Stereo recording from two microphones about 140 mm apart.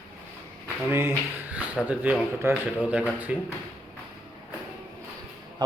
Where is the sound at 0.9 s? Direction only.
15° right (ahead or behind).